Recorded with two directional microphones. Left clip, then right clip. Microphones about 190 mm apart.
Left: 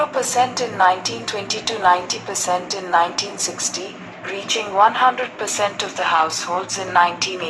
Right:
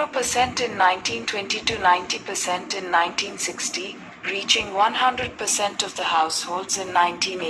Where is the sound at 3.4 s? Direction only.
65° right (ahead or behind).